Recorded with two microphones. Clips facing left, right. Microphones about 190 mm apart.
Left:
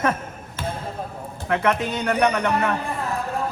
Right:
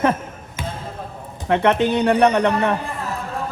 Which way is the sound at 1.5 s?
30° right (ahead or behind).